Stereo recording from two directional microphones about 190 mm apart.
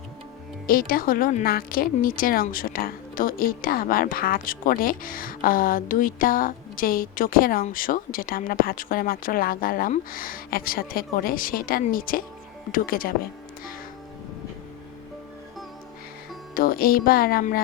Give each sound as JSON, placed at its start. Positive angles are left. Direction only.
{"t": 0.7, "sound": "a woman's voice", "side_deg": 50}
{"t": 16.6, "sound": "a woman's voice", "side_deg": 50}